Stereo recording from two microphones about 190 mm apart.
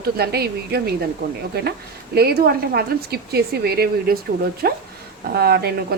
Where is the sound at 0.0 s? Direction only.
55° right (ahead or behind).